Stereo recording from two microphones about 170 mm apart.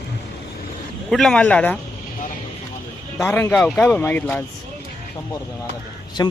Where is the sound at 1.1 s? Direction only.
5° left (ahead or behind).